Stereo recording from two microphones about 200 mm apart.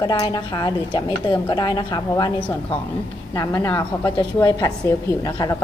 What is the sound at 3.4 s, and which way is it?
A woman's voice, 15° left (ahead or behind).